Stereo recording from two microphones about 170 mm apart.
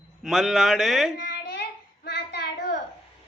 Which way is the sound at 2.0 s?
75° left (ahead or behind).